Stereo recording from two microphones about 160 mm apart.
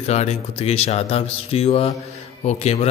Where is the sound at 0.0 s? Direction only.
40° left (ahead or behind).